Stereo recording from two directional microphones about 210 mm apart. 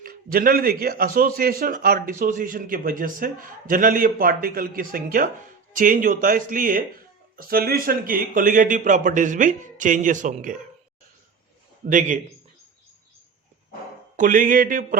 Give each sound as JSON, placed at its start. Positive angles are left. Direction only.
{"t": 0.0, "sound": "a man's voice", "side_deg": -45}
{"t": 11.9, "sound": "speech", "side_deg": -40}
{"t": 14.2, "sound": "speech", "side_deg": -40}